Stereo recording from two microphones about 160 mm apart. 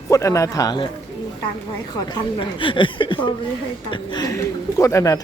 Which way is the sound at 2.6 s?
30° left (ahead or behind).